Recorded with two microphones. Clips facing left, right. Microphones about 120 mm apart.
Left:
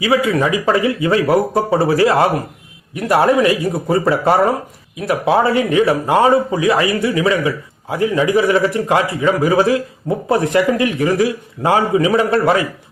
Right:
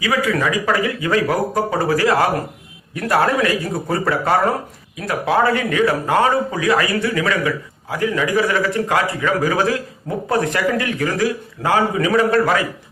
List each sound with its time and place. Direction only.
0.0 s a man's voice: 25° left (ahead or behind)